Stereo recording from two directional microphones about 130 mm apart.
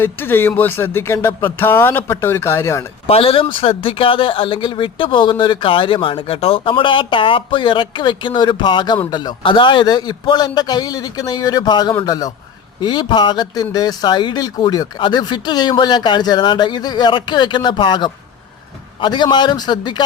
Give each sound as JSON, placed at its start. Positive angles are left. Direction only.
{"t": 0.0, "sound": "speech", "side_deg": 15}
{"t": 3.1, "sound": "a man's voice", "side_deg": 45}